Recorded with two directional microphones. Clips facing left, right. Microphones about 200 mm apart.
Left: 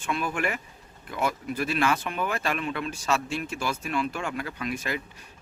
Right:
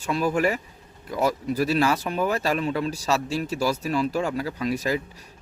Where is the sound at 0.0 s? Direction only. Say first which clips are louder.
Right 6 dB; 35° right (ahead or behind).